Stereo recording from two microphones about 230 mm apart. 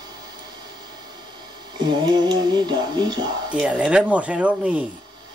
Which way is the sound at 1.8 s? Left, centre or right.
Centre.